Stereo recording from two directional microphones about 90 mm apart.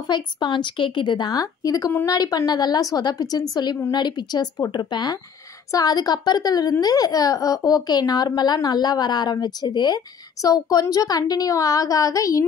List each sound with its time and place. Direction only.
0.1 s a woman's voice: 55° left (ahead or behind); by 12.4 s 40° left (ahead or behind)